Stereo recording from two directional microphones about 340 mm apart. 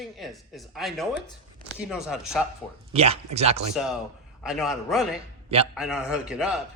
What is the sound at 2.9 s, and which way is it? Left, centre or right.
Speech, centre.